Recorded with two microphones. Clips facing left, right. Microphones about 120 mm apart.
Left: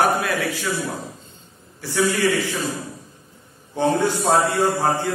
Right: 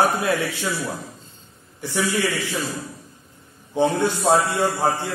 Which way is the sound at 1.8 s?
20° right (ahead or behind).